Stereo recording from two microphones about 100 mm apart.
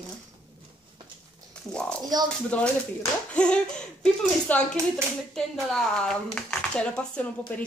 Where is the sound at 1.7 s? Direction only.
10° left (ahead or behind).